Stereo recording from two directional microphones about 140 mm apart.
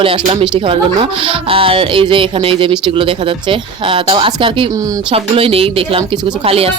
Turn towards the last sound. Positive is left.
turn(degrees=-45)  # may be behind; listen again after turning